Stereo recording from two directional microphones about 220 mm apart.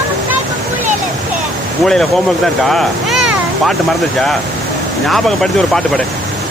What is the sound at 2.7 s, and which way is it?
Speech, centre (ahead or behind).